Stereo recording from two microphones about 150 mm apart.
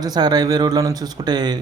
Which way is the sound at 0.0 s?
25° right (ahead or behind).